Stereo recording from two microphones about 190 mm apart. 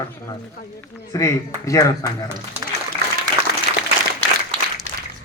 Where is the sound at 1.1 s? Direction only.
15° left (ahead or behind).